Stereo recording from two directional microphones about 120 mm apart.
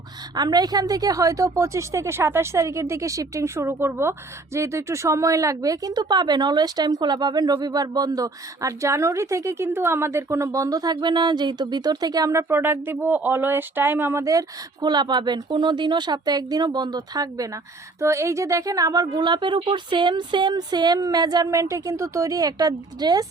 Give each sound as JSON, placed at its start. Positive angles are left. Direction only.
{"t": 0.3, "sound": "speech", "side_deg": -35}